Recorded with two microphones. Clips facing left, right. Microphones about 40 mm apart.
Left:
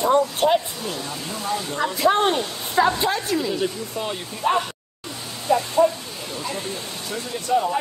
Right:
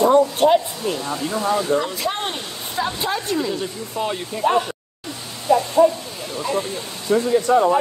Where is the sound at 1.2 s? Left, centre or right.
Centre.